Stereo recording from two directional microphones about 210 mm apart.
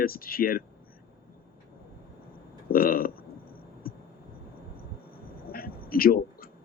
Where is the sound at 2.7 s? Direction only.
45° left (ahead or behind).